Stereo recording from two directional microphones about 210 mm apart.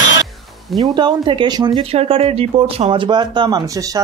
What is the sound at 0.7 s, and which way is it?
Speech, 20° right (ahead or behind).